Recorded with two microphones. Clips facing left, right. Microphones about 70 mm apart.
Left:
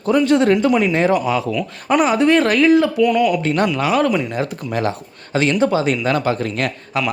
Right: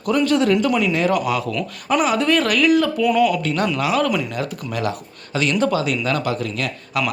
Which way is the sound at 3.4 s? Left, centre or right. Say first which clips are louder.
Left 3 dB; left.